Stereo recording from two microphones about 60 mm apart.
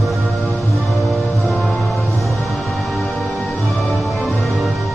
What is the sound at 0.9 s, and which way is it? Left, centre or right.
Music, centre.